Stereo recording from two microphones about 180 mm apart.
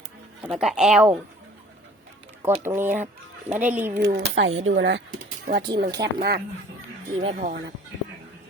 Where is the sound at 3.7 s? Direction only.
10° right (ahead or behind).